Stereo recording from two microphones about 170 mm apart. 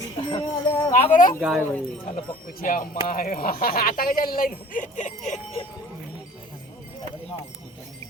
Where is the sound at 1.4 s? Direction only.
5° right (ahead or behind).